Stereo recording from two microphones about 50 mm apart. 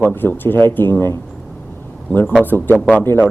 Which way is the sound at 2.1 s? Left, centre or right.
Left.